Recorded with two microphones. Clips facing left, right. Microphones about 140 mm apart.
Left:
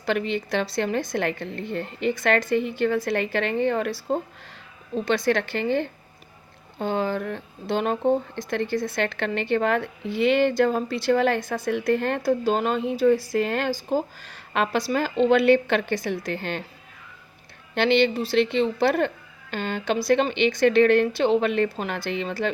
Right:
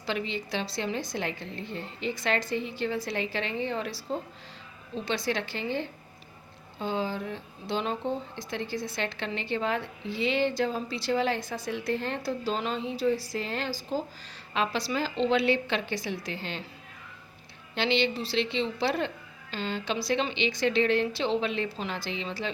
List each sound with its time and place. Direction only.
0.0 s speech: 60° left (ahead or behind)
17.7 s speech: 55° left (ahead or behind)